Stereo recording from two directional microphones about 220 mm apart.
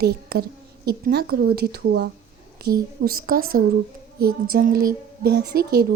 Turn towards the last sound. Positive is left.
turn(degrees=-45)  # may be behind; listen again after turning